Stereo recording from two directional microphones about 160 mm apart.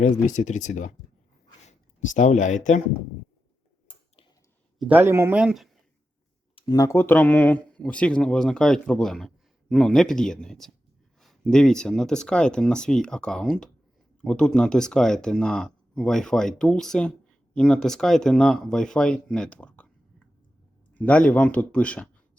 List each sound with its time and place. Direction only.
0.0 s speech: 50° left (ahead or behind)
1.6 s a sound: 50° left (ahead or behind)
4.8 s a man's voice: 10° right (ahead or behind)
6.6 s a man's voice: 25° left (ahead or behind); by 22.1 s 5° left (ahead or behind)